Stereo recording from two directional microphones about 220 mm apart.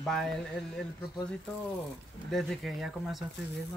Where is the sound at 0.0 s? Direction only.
Centre (ahead or behind).